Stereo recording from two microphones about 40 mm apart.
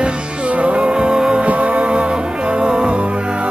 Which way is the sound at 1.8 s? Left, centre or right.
Right.